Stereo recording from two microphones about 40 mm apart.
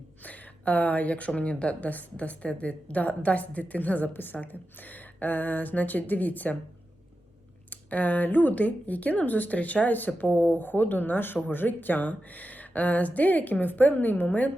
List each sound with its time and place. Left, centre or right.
0.2 s a sound: left
1.4 s a woman's voice: left
4.1 s a woman's voice: left
7.7 s a woman's voice: left